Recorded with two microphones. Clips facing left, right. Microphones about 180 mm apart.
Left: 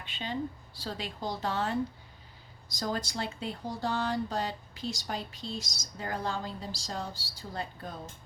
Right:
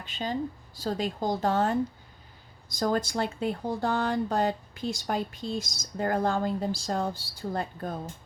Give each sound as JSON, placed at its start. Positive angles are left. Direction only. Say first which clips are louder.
{"t": 0.0, "sound": "speech", "louder": "right 4 dB", "side_deg": -40}